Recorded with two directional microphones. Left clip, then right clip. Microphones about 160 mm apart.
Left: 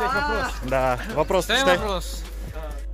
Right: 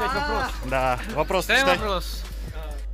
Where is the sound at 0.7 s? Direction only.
10° left (ahead or behind).